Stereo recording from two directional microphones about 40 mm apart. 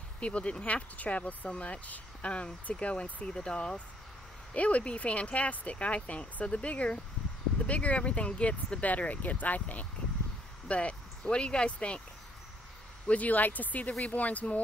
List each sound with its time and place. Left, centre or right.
0.2 s speech: left
13.1 s speech: left